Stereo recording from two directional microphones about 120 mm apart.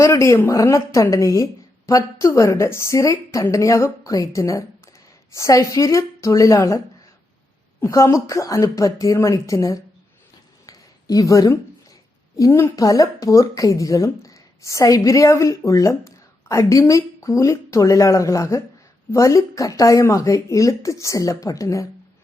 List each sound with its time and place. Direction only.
0.0 s a woman's voice: 25° left (ahead or behind)
7.9 s a woman's voice: 25° left (ahead or behind)
10.7 s a sound: 30° left (ahead or behind)
12.4 s a woman's voice: 20° left (ahead or behind)